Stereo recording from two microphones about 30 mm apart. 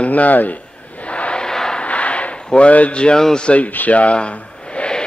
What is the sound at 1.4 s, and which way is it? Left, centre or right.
Vehicle, left.